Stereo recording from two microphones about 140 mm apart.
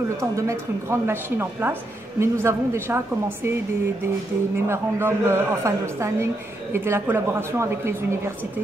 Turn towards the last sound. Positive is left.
turn(degrees=-20)  # may be behind; listen again after turning